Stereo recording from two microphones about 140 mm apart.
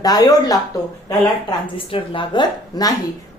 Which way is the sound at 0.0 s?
25° left (ahead or behind).